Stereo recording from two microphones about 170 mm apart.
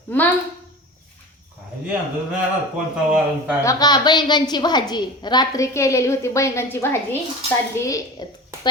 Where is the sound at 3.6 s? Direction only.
20° left (ahead or behind).